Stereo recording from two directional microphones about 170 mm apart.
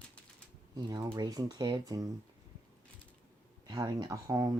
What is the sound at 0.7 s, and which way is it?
Speech, 25° right (ahead or behind).